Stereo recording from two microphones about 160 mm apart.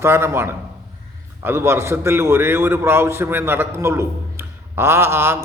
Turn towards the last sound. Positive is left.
turn(degrees=-15)  # may be behind; listen again after turning